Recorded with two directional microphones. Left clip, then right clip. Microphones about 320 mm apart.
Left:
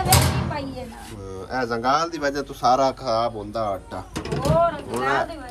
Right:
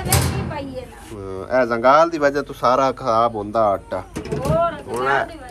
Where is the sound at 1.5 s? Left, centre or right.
Centre.